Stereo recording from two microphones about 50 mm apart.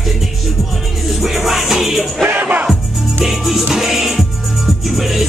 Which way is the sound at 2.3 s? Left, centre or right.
Right.